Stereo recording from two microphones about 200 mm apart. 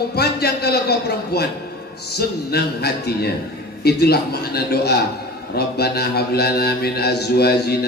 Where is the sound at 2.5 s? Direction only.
50° left (ahead or behind).